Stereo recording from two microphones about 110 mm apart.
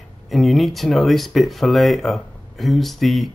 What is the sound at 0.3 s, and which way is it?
Speech, centre (ahead or behind).